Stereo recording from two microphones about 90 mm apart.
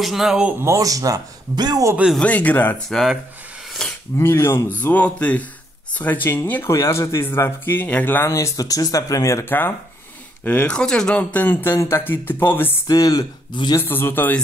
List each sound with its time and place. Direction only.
0.0 s speech: 5° right (ahead or behind)
0.6 s speech: 35° right (ahead or behind); by 1.9 s 50° right (ahead or behind)
2.1 s speech: 15° left (ahead or behind)
2.9 s speech: centre (ahead or behind)
3.8 s a sound: 5° left (ahead or behind)
4.2 s speech: 25° left (ahead or behind)
6.7 s speech: 35° left (ahead or behind)
8.3 s speech: 35° left (ahead or behind)
9.4 s speech: 25° left (ahead or behind)
12.8 s speech: 45° left (ahead or behind)
13.7 s speech: 25° left (ahead or behind)